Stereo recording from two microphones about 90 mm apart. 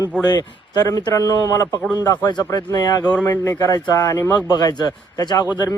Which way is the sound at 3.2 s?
40° left (ahead or behind).